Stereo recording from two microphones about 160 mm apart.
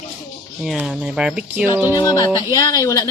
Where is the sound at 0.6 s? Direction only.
Centre (ahead or behind).